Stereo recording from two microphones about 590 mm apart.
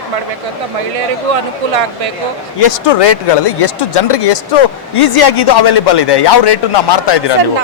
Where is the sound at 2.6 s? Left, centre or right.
Left.